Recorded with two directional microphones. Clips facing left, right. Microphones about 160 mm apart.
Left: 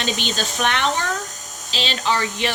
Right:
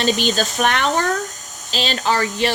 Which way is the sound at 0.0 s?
40° right (ahead or behind).